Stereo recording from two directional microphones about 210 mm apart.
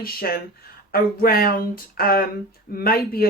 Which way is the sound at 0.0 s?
45° left (ahead or behind).